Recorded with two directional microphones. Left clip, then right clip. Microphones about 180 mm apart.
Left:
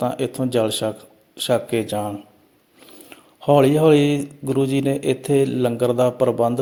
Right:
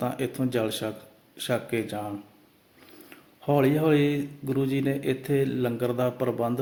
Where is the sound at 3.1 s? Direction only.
40° left (ahead or behind).